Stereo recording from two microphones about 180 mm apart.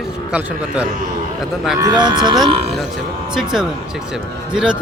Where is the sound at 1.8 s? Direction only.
25° right (ahead or behind).